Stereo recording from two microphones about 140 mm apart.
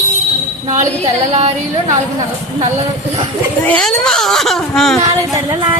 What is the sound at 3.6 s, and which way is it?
A woman's voice, 5° left (ahead or behind).